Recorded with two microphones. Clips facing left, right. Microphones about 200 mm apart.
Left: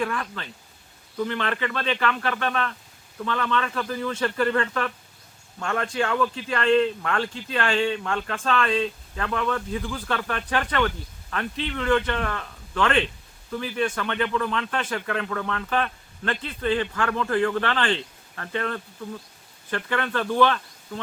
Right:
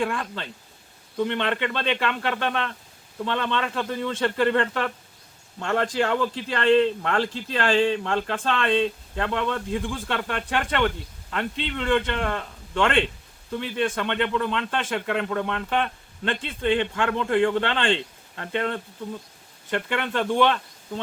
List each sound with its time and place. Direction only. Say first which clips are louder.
0.0 s a man's voice: right 1 dB; 25° right (ahead or behind)